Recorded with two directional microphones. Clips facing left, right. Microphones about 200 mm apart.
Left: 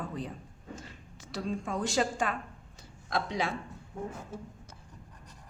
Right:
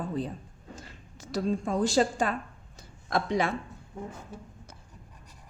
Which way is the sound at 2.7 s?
45° right (ahead or behind).